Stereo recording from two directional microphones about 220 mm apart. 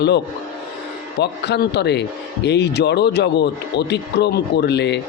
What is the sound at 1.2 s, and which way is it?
Speech, 50° left (ahead or behind).